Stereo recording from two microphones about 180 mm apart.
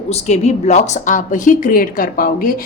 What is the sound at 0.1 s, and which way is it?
A woman's voice, 35° left (ahead or behind).